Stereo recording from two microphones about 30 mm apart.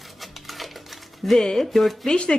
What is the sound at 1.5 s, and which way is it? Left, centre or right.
Speech, centre.